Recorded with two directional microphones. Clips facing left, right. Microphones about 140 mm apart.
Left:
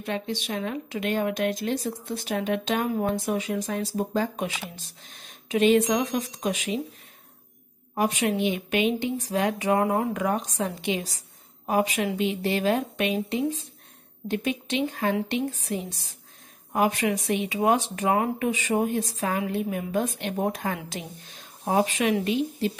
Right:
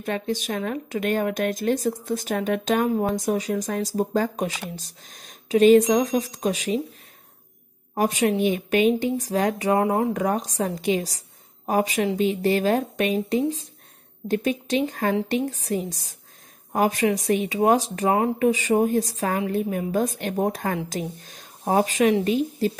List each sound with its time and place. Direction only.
0.0 s speech: 45° right (ahead or behind)
7.9 s speech: 35° right (ahead or behind)